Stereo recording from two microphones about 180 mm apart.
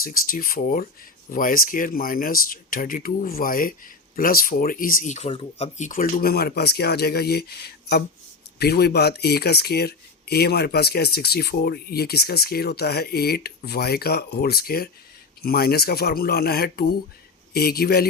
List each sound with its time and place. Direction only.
0.0 s speech: 55° left (ahead or behind)